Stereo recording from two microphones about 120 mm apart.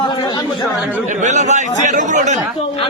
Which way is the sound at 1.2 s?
80° right.